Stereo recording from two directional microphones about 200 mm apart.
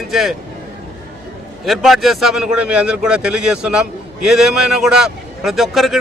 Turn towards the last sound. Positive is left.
turn(degrees=0)  # may be behind; listen again after turning